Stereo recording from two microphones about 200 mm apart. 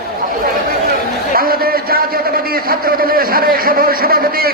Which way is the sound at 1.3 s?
45° right (ahead or behind).